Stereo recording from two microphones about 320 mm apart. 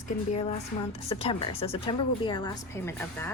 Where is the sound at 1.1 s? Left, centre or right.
Centre.